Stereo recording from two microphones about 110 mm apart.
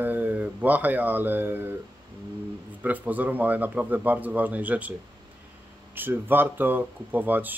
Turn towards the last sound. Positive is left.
turn(degrees=-15)  # may be behind; listen again after turning